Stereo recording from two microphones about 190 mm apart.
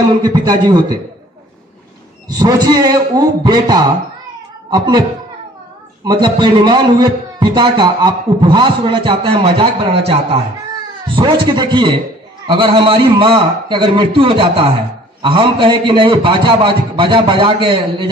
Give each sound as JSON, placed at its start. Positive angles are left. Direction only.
{"t": 0.0, "sound": "a man's voice", "side_deg": -20}
{"t": 2.2, "sound": "a man's voice", "side_deg": -20}
{"t": 6.0, "sound": "a man's voice", "side_deg": -25}
{"t": 11.1, "sound": "a man's voice", "side_deg": -25}